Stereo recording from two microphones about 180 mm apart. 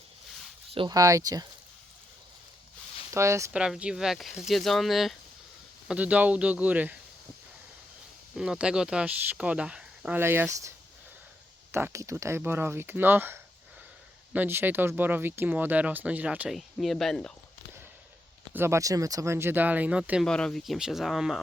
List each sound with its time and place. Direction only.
0.7 s speech: 25° right (ahead or behind)
3.1 s speech: 15° right (ahead or behind)
3.5 s speech: 5° right (ahead or behind)
8.4 s speech: 5° right (ahead or behind)
11.7 s speech: 15° right (ahead or behind); by 17.3 s centre (ahead or behind)
18.5 s speech: 15° right (ahead or behind)